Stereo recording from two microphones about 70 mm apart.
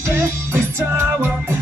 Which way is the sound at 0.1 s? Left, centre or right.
Right.